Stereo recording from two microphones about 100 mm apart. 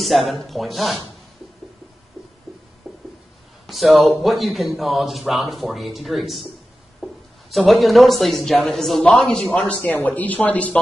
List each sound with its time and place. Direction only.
0.0 s a man's voice: centre (ahead or behind)
3.6 s a man's voice: centre (ahead or behind)
7.0 s a sound: 5° right (ahead or behind)
7.5 s a man's voice: centre (ahead or behind)